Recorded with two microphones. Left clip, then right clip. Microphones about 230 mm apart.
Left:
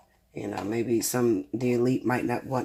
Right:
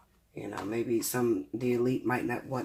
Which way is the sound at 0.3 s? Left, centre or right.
Left.